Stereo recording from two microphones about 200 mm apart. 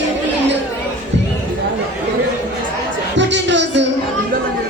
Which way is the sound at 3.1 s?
65° right (ahead or behind).